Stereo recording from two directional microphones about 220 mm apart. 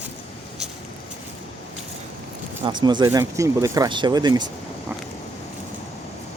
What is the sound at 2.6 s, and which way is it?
Speech, 20° right (ahead or behind).